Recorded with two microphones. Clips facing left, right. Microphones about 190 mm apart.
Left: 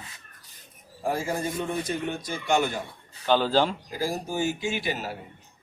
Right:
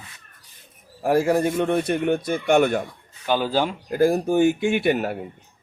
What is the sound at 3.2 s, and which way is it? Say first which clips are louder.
Speech: even; 10° right (ahead or behind).